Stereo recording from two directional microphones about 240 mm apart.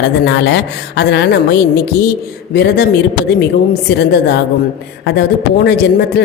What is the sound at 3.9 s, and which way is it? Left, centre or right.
A woman's voice, left.